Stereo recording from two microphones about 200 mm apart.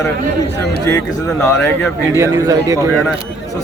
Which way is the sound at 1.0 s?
15° left (ahead or behind).